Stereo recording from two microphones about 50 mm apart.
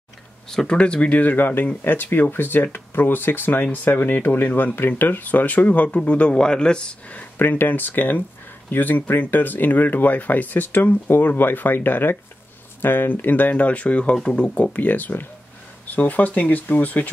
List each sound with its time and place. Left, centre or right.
0.5 s speech: centre
0.7 s speech: left
4.7 s speech: left
7.3 s speech: left
14.7 s speech: left